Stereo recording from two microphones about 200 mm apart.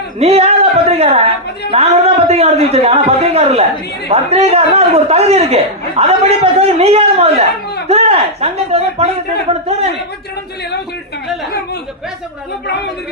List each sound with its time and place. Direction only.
0.2 s a man's voice: 30° right (ahead or behind)